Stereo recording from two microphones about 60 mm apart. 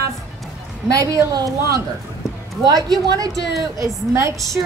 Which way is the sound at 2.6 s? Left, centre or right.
Right.